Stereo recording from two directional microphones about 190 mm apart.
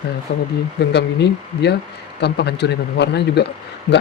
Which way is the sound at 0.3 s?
60° left (ahead or behind).